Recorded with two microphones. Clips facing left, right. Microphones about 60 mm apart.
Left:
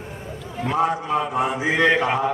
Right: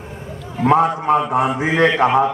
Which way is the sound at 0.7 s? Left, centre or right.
Right.